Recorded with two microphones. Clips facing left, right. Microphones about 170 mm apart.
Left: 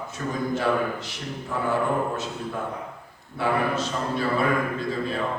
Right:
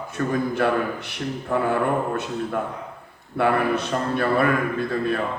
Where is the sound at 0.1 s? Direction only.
60° right (ahead or behind).